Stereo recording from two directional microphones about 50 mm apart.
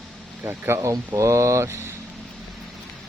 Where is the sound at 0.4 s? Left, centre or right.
Right.